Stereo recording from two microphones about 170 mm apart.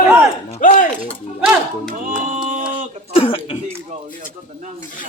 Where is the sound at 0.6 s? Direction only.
50° left (ahead or behind).